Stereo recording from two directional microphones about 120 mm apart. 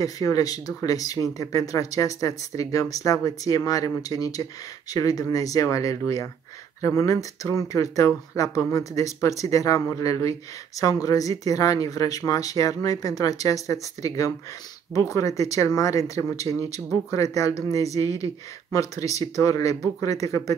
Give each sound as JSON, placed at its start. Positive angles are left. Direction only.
{"t": 0.0, "sound": "speech", "side_deg": 30}